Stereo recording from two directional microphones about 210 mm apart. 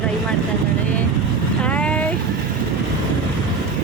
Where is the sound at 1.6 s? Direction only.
5° left (ahead or behind).